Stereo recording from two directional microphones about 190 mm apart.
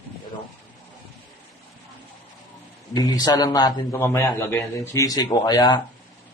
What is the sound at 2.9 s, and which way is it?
A man's voice, 20° left (ahead or behind).